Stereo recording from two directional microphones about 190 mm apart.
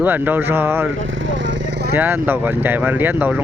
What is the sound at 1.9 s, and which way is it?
Speech, 10° right (ahead or behind).